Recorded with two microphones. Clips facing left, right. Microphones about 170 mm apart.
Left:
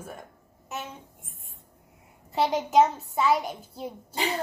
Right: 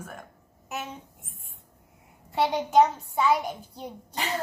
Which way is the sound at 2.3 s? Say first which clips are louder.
Even; centre (ahead or behind).